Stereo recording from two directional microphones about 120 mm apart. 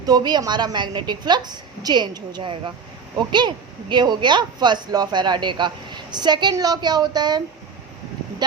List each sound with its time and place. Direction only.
0.0 s speech: 35° right (ahead or behind)